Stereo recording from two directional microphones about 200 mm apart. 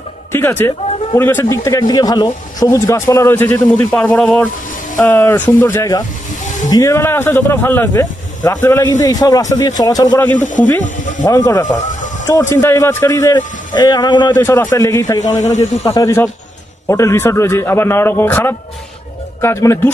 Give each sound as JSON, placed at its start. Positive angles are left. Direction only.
{"t": 0.3, "sound": "speech", "side_deg": 10}
{"t": 10.4, "sound": "speech", "side_deg": 40}
{"t": 11.2, "sound": "speech", "side_deg": 15}